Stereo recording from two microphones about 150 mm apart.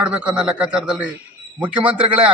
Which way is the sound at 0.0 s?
5° right (ahead or behind).